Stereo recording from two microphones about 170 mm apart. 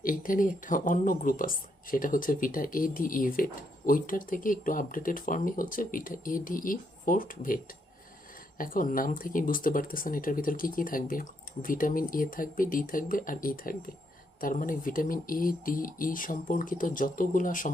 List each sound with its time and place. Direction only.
0.0 s speech: 55° left (ahead or behind)